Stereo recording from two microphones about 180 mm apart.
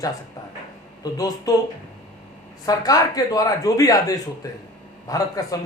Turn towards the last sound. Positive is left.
turn(degrees=20)  # may be behind; listen again after turning